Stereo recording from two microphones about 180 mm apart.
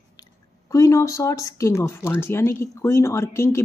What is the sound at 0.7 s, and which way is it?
A woman's voice, 15° left (ahead or behind).